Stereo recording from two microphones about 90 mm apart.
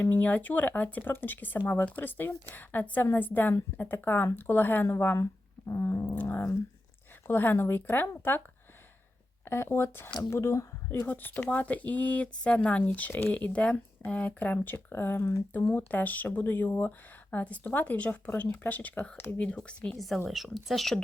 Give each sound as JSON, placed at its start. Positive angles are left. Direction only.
{"t": 0.0, "sound": "speech", "side_deg": 20}
{"t": 9.4, "sound": "a woman's voice", "side_deg": 25}
{"t": 20.0, "sound": "a woman's voice", "side_deg": 0}